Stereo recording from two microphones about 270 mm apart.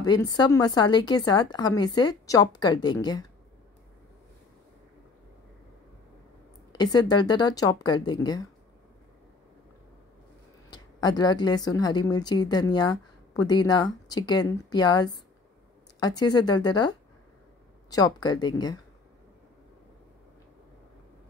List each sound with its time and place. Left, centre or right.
0.0 s a woman's voice: centre
6.8 s a woman's voice: centre
10.7 s a woman's voice: centre